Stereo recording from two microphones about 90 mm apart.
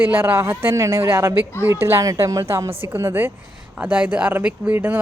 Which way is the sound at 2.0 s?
40° right (ahead or behind).